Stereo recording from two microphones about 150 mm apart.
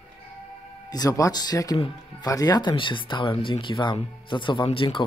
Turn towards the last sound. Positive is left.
turn(degrees=35)  # may be behind; listen again after turning